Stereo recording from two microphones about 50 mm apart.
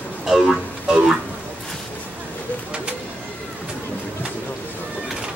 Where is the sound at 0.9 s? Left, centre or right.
Centre.